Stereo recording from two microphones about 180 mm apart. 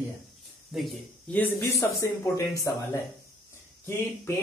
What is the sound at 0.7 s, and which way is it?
Speech, 5° left (ahead or behind).